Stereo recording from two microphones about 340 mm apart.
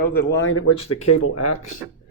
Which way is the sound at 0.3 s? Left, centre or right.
Left.